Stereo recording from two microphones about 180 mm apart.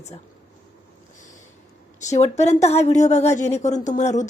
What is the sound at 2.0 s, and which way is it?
A woman's voice, 40° left (ahead or behind).